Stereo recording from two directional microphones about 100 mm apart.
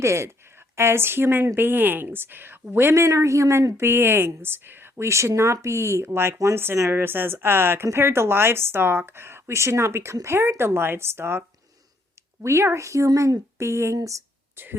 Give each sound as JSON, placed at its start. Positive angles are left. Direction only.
{"t": 0.0, "sound": "speech", "side_deg": -25}